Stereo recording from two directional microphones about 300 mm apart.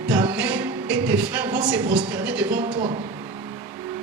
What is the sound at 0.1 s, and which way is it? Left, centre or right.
Music, centre.